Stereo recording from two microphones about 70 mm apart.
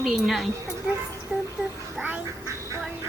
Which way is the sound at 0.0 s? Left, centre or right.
Centre.